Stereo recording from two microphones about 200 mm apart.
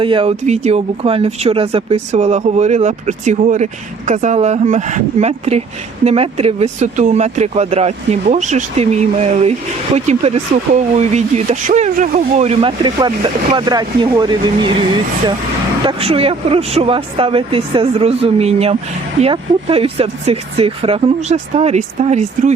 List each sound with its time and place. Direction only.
0.0 s speech: 25° right (ahead or behind)
15.9 s speech: 30° right (ahead or behind)